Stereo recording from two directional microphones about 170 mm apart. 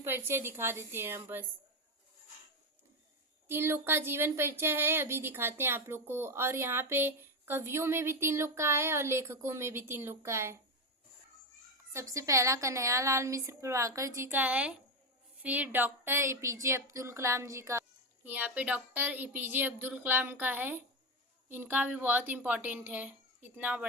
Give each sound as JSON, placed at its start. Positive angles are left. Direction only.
{"t": 0.0, "sound": "speech", "side_deg": -10}
{"t": 3.5, "sound": "speech", "side_deg": -15}
{"t": 11.9, "sound": "speech", "side_deg": -20}